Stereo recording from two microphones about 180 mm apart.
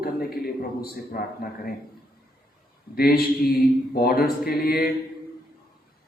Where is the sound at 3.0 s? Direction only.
55° left (ahead or behind).